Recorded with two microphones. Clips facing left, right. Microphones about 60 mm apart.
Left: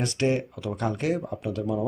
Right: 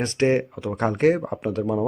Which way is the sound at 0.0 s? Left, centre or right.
Right.